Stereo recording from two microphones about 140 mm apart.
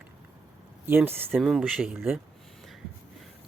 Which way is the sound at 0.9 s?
15° right (ahead or behind).